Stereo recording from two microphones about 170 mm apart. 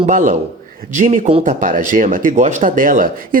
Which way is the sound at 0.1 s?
50° right (ahead or behind).